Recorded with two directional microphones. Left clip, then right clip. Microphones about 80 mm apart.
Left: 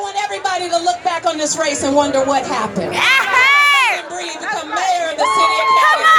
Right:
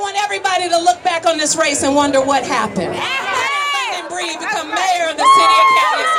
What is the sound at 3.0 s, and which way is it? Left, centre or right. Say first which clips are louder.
Crowd: left 8 dB; left.